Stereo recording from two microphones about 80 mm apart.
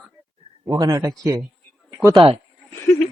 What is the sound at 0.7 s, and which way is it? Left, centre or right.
Speech, right.